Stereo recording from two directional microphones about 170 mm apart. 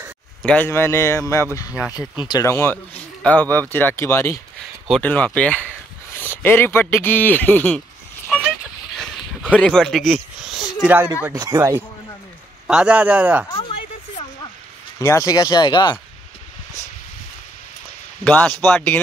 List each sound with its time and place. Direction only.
0.4 s a man's voice: 5° left (ahead or behind)
0.7 s speech: 15° left (ahead or behind)
1.7 s speech: 10° right (ahead or behind)
2.0 s speech: 25° left (ahead or behind); by 7.8 s 10° left (ahead or behind)
8.9 s a sound: 5° left (ahead or behind); by 11.1 s 10° right (ahead or behind)
11.3 s speech: 20° right (ahead or behind)
12.6 s speech: 5° right (ahead or behind)
13.5 s a sound: 30° left (ahead or behind)
15.0 s speech: 20° left (ahead or behind)
18.2 s speech: 10° left (ahead or behind)